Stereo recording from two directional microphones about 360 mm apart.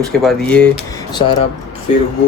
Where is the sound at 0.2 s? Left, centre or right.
Centre.